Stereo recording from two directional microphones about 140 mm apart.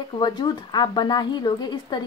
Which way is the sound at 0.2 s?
30° left (ahead or behind).